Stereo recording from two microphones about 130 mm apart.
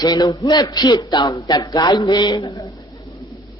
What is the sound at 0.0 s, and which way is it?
Speech, 30° left (ahead or behind).